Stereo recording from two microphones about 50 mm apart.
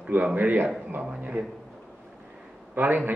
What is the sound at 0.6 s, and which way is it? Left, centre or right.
Speech, right.